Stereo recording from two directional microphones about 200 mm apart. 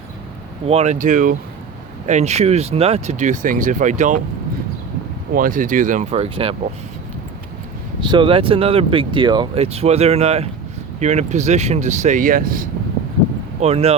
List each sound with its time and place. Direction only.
0.7 s speech: 35° right (ahead or behind)
5.3 s speech: 45° right (ahead or behind)
8.0 s speech: 25° right (ahead or behind); by 12.6 s 45° right (ahead or behind)
13.6 s speech: 30° right (ahead or behind)